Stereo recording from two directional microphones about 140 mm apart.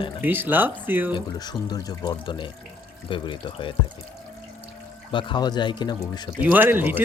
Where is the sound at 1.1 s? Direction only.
30° left (ahead or behind).